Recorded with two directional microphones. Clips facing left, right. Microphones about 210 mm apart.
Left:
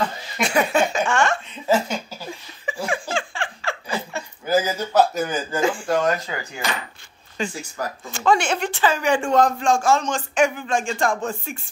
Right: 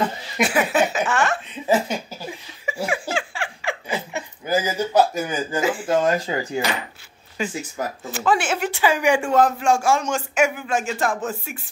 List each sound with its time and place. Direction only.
0.4 s a sound: 5° right (ahead or behind)
2.6 s laughter: 10° right (ahead or behind)
5.9 s speech: 25° right (ahead or behind)
7.4 s a man's voice: 5° right (ahead or behind)
7.8 s speech: 20° right (ahead or behind)
8.1 s a man's voice: 5° right (ahead or behind)